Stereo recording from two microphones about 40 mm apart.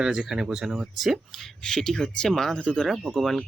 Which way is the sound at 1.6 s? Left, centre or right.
Centre.